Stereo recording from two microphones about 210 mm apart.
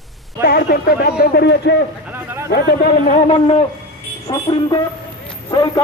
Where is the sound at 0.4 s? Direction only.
50° left (ahead or behind).